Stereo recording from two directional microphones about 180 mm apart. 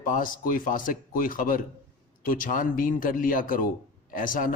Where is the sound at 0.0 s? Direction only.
50° left (ahead or behind).